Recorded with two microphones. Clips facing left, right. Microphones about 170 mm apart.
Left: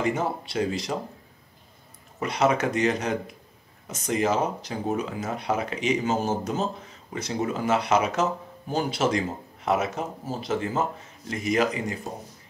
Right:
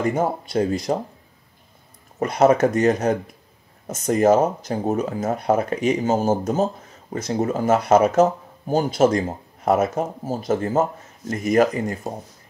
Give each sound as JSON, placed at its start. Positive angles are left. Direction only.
{"t": 0.0, "sound": "speech", "side_deg": -45}
{"t": 2.1, "sound": "speech", "side_deg": -45}